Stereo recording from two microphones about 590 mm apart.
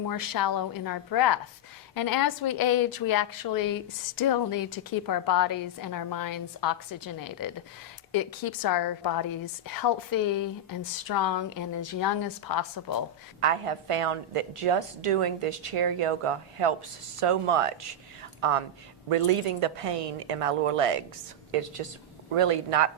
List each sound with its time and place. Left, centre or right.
0.0 s a woman's voice: left
13.4 s a woman's voice: right